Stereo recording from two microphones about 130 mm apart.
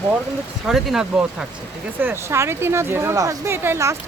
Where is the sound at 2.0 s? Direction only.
20° right (ahead or behind).